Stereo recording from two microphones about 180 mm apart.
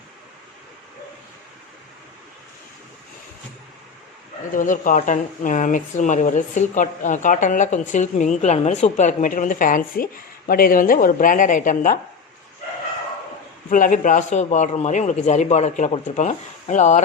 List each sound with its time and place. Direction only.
4.5 s speech: 45° left (ahead or behind)
13.7 s a man's voice: 45° left (ahead or behind)